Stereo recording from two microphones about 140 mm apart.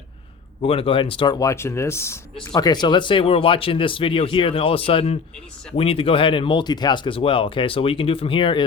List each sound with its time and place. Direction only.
0.6 s speech: 40° left (ahead or behind)
1.4 s speech: 20° left (ahead or behind)
2.6 s speech: 30° left (ahead or behind)